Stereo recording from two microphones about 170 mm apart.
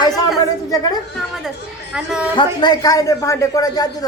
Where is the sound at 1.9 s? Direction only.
5° right (ahead or behind).